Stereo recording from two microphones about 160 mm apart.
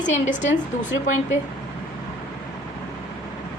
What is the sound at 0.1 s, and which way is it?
A woman's voice, 50° left (ahead or behind).